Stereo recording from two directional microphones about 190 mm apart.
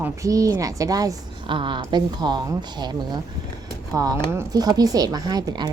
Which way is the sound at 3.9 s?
20° right (ahead or behind).